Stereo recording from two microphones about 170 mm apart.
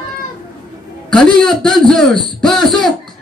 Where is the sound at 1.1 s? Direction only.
5° left (ahead or behind).